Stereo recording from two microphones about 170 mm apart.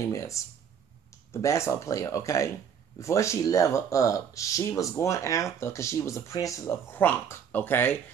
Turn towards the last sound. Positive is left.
turn(degrees=10)  # may be behind; listen again after turning